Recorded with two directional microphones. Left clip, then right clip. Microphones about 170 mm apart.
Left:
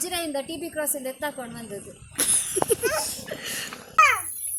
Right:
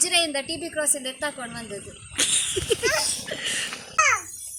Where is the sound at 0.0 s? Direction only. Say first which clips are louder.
Right 6 dB; 75° left (ahead or behind).